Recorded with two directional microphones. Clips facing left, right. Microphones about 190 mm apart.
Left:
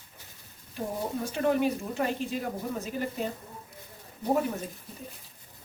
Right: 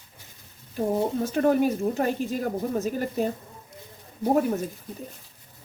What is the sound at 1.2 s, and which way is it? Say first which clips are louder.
Speech: right 3 dB; 45° right (ahead or behind).